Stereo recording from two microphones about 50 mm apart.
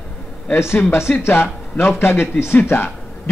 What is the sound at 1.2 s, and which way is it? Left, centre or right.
A man's voice, left.